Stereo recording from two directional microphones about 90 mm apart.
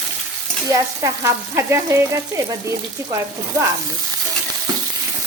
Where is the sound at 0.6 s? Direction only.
35° right (ahead or behind).